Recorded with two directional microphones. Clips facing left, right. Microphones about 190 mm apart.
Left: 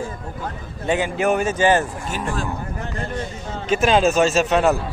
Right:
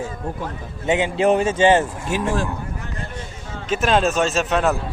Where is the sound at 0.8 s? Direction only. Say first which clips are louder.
Right 2 dB; 25° right (ahead or behind).